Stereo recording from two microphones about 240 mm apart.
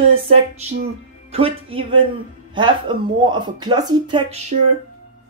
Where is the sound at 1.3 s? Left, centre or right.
Right.